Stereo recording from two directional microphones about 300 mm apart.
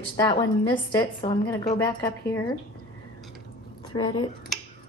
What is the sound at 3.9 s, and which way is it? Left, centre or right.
Speech, centre.